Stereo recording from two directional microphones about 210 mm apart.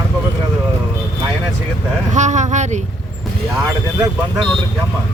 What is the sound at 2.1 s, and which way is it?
Speech, 35° right (ahead or behind).